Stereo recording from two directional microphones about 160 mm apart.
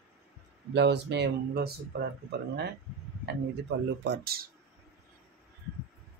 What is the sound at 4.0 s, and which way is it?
Speech, 80° right.